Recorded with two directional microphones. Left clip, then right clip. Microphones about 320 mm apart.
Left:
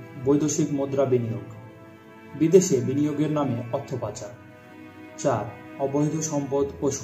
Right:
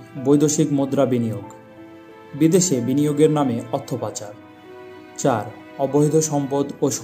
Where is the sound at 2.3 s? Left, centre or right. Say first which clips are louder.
Right 1 dB; right.